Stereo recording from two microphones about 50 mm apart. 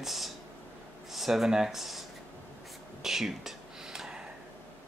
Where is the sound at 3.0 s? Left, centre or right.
Centre.